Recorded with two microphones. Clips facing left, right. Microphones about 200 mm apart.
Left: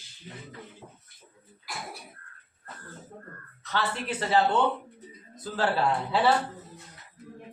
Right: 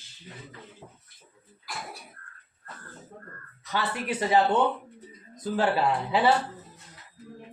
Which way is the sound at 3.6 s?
10° right (ahead or behind).